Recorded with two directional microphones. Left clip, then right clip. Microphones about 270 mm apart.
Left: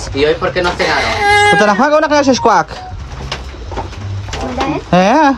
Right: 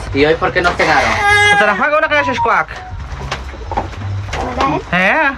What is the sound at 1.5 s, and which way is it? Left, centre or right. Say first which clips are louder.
Speech: left 2 dB; centre.